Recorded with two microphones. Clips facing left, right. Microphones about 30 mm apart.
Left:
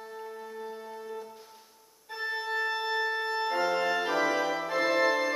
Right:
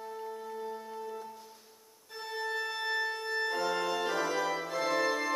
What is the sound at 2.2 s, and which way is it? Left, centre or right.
Organ, left.